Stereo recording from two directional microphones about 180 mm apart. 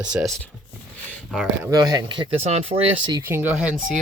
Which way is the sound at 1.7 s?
20° right (ahead or behind).